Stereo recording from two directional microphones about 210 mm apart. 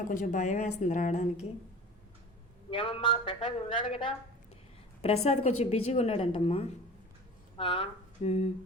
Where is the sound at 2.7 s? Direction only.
25° left (ahead or behind).